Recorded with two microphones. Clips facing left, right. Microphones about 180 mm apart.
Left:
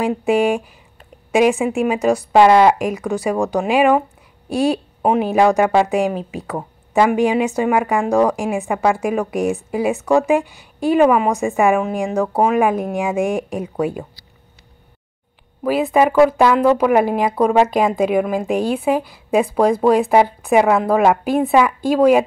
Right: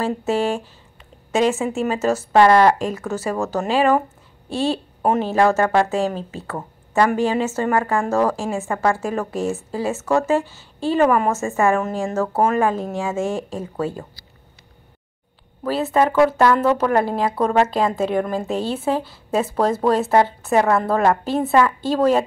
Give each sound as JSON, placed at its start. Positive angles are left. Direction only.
{"t": 0.0, "sound": "speech", "side_deg": 15}
{"t": 5.0, "sound": "speech", "side_deg": 15}
{"t": 15.6, "sound": "speech", "side_deg": 15}